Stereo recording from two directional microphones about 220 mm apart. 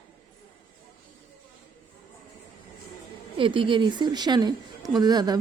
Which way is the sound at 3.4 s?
20° right (ahead or behind).